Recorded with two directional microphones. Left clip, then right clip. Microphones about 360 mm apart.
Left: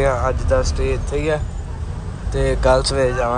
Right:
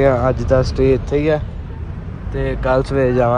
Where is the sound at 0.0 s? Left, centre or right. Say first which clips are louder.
Right 4 dB; centre.